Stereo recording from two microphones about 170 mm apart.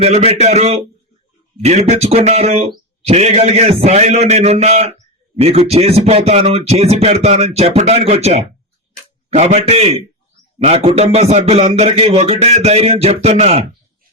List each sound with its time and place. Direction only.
0.0 s speech: 35° right (ahead or behind)